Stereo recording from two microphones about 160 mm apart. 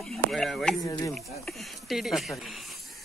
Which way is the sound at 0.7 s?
20° left (ahead or behind).